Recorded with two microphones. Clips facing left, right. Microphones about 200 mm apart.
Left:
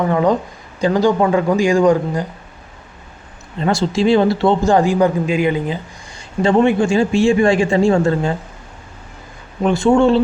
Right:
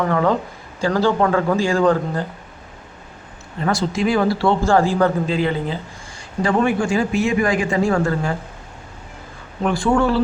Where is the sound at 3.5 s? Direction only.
25° left (ahead or behind).